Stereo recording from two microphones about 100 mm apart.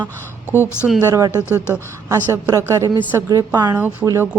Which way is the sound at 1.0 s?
35° right (ahead or behind).